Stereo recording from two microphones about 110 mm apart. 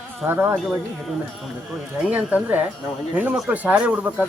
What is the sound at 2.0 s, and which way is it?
Speech, 15° right (ahead or behind).